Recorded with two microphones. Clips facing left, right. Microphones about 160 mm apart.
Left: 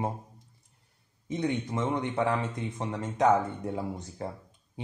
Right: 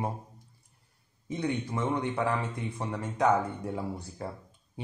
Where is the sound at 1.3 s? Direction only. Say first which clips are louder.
Left 1 dB; 20° left (ahead or behind).